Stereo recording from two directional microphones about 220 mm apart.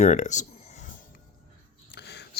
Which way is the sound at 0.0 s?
30° left (ahead or behind).